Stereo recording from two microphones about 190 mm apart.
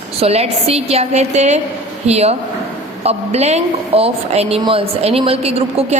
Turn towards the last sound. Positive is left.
turn(degrees=-30)  # may be behind; listen again after turning